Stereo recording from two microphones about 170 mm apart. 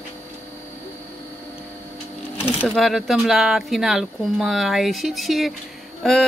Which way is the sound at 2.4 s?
5° right (ahead or behind).